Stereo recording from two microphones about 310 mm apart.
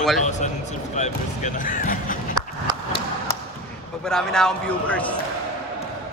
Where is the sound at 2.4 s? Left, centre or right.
Centre.